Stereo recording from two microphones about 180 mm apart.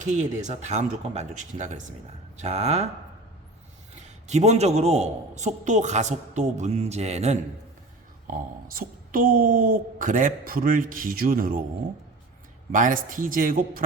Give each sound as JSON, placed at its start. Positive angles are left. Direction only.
{"t": 0.0, "sound": "a man's voice", "side_deg": -40}
{"t": 4.3, "sound": "a man's voice", "side_deg": -40}
{"t": 8.3, "sound": "speech", "side_deg": -50}
{"t": 12.7, "sound": "speech", "side_deg": -50}